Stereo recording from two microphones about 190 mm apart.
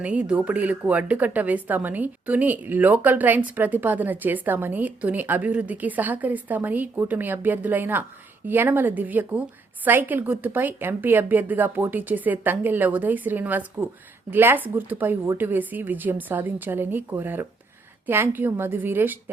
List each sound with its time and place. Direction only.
0.0 s speech: 5° right (ahead or behind)